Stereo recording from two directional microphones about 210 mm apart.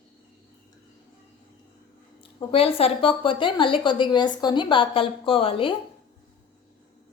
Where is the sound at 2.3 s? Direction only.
25° left (ahead or behind).